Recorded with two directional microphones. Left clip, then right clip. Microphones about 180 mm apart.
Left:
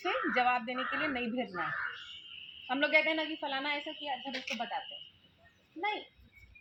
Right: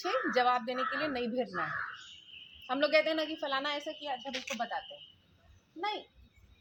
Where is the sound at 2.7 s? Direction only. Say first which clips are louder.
Even; 15° right (ahead or behind).